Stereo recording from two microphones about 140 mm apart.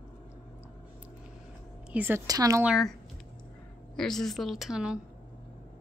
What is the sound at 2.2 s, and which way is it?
Speech, 25° right (ahead or behind).